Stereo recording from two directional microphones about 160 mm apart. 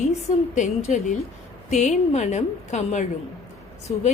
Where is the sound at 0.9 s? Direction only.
50° left (ahead or behind).